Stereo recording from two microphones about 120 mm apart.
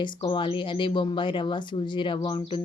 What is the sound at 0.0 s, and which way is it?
A woman's voice, 40° left (ahead or behind).